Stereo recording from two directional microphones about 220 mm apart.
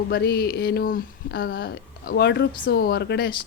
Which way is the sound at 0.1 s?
45° left (ahead or behind).